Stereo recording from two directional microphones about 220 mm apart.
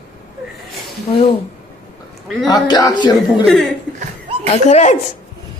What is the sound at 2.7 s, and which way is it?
Speech, 20° left (ahead or behind).